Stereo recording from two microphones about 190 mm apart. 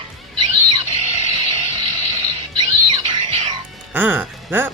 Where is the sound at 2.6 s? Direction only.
25° right (ahead or behind).